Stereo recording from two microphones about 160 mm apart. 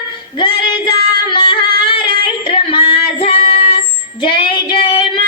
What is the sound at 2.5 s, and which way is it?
Female singing, 35° left (ahead or behind).